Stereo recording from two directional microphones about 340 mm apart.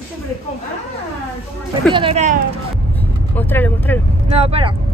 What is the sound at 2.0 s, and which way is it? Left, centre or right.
Speech, centre.